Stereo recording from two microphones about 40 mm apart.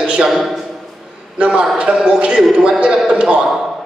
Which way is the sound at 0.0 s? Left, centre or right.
Right.